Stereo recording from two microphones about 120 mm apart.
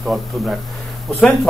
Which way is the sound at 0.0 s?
5° right (ahead or behind).